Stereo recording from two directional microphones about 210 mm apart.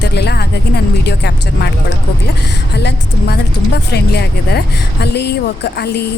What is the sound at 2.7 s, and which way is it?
Speech, 50° left (ahead or behind).